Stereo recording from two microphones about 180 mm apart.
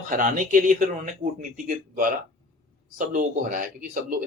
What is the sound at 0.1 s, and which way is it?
Speech, 45° right (ahead or behind).